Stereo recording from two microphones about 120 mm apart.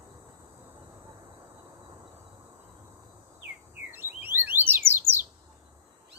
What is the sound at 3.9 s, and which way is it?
Bird, 15° right (ahead or behind).